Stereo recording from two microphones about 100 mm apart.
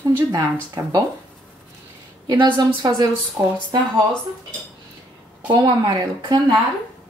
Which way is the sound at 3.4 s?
35° right (ahead or behind).